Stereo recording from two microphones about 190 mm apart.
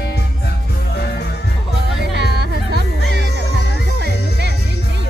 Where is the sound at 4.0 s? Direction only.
65° right (ahead or behind).